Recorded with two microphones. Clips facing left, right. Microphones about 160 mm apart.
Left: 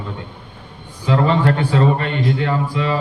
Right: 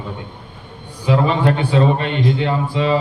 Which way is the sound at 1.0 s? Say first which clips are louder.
Even; 15° right (ahead or behind).